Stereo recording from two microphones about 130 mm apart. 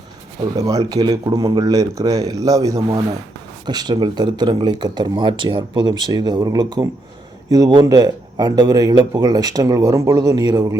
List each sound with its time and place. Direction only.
0.5 s a man's voice: 30° right (ahead or behind)